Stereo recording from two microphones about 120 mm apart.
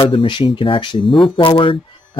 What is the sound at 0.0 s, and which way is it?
Speech, 45° left (ahead or behind).